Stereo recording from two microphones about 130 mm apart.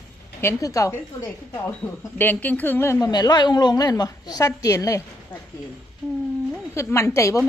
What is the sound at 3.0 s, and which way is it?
A woman's voice, 30° left (ahead or behind).